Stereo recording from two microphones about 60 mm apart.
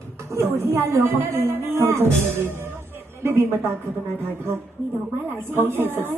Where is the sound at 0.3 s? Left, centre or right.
Right.